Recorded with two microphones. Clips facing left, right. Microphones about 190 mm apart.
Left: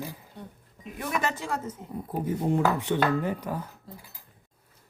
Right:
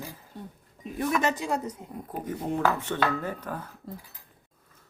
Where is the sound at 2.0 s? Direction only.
10° left (ahead or behind).